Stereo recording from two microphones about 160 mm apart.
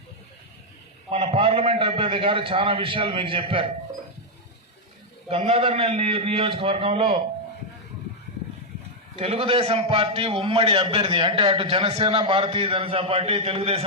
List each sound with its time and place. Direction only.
1.1 s a man's voice: 35° right (ahead or behind)
5.3 s a man's voice: 40° right (ahead or behind)
9.1 s a man's voice: 35° right (ahead or behind)